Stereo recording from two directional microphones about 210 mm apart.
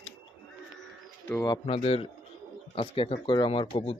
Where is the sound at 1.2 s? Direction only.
10° left (ahead or behind).